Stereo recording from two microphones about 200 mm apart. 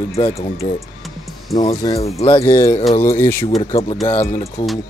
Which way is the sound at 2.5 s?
15° left (ahead or behind).